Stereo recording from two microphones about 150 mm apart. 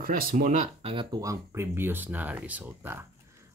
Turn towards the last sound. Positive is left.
turn(degrees=-15)  # may be behind; listen again after turning